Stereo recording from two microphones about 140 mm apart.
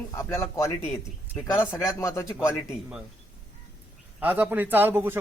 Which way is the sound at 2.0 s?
20° left (ahead or behind).